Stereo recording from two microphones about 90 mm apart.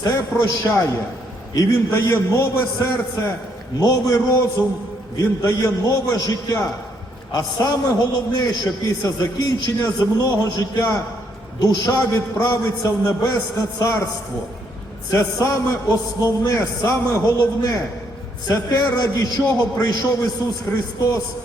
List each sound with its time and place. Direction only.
0.0 s a man's voice: 30° left (ahead or behind)
11.6 s a man's voice: 30° left (ahead or behind)
15.1 s a man's voice: 35° left (ahead or behind)